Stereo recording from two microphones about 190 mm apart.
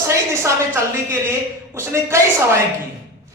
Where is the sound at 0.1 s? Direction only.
15° right (ahead or behind).